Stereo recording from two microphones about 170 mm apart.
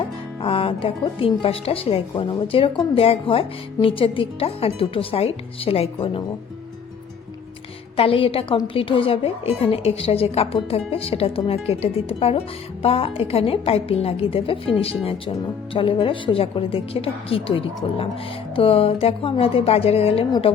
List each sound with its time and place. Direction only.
0.0 s speech: 30° left (ahead or behind)
7.9 s speech: 35° left (ahead or behind)